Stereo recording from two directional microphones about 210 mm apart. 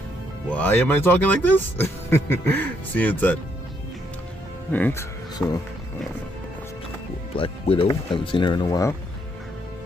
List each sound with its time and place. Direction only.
0.5 s speech: 10° left (ahead or behind)
4.7 s speech: 10° left (ahead or behind)
7.3 s speech: 25° left (ahead or behind)